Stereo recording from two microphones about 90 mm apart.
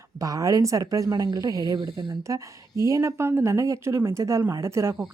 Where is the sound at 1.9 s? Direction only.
60° right (ahead or behind).